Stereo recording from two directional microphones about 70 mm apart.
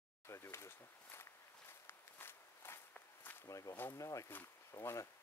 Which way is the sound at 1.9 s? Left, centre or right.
Left.